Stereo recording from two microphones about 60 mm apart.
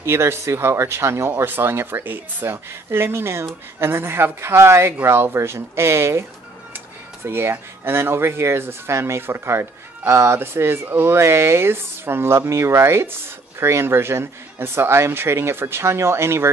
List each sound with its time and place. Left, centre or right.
0.0 s speech: right
1.4 s speech: right
7.2 s speech: right